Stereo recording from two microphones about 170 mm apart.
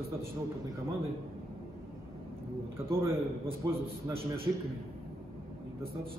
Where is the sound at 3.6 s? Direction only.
20° right (ahead or behind).